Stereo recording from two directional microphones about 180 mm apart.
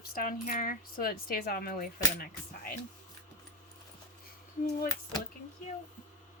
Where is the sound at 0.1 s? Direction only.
50° left (ahead or behind).